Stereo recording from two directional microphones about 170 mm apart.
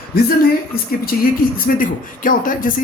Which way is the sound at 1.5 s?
55° left (ahead or behind).